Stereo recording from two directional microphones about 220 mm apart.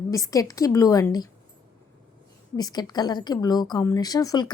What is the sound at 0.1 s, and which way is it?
A woman's voice, 15° left (ahead or behind).